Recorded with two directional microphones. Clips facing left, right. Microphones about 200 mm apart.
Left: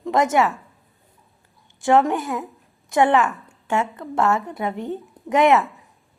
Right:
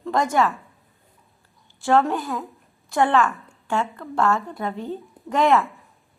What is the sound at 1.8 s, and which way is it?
A woman's voice, 15° left (ahead or behind).